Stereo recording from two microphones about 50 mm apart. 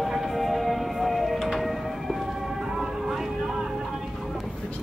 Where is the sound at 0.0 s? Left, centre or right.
Centre.